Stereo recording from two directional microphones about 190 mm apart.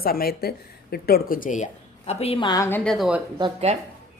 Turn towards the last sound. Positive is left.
turn(degrees=-30)  # may be behind; listen again after turning